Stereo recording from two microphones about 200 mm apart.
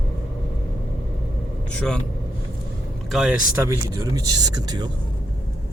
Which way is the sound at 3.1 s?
Centre (ahead or behind).